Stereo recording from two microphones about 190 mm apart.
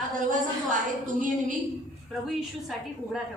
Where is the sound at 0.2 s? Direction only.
45° right (ahead or behind).